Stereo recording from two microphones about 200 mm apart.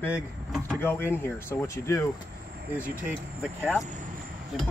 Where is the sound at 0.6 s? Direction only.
10° left (ahead or behind).